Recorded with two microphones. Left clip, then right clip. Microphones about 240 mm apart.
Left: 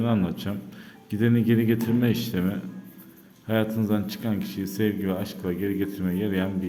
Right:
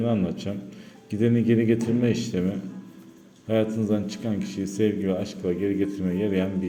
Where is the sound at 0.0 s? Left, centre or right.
Centre.